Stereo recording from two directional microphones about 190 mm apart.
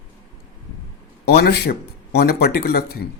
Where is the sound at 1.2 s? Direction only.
55° left (ahead or behind).